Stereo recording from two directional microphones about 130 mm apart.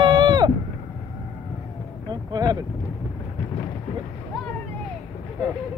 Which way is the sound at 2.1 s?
30° right (ahead or behind).